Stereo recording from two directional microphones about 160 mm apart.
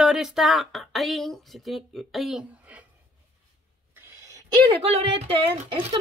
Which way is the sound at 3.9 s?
20° right (ahead or behind).